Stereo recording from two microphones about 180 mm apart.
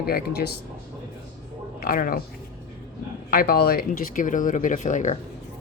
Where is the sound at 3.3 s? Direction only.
60° left (ahead or behind); by 5.2 s 45° left (ahead or behind).